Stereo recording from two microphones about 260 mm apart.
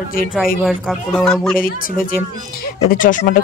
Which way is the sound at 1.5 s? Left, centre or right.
Left.